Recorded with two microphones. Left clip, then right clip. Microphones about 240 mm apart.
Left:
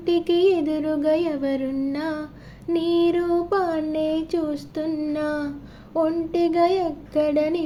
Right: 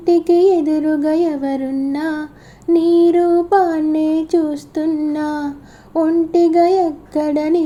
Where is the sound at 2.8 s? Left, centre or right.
Right.